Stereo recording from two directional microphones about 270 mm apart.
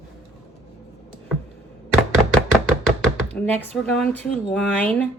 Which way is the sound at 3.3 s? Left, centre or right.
Centre.